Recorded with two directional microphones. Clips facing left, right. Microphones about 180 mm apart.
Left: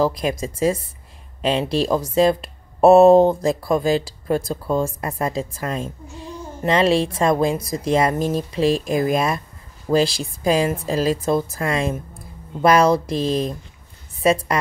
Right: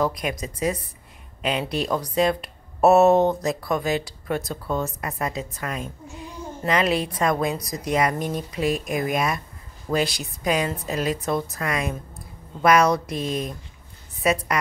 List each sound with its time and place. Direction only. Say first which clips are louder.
0.0 s a woman's voice: left 5 dB; 30° left (ahead or behind)